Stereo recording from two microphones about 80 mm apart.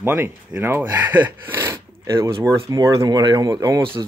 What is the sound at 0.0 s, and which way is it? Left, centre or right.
Speech, right.